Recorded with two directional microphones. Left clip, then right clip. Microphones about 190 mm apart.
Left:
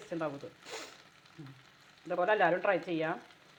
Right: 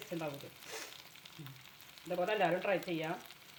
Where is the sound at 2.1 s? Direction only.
10° left (ahead or behind).